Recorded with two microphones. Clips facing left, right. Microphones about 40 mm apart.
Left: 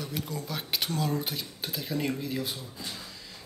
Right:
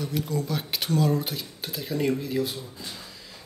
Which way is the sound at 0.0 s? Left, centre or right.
Centre.